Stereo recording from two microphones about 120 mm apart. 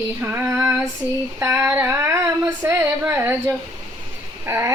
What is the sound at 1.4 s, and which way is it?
Child singing, 20° right (ahead or behind).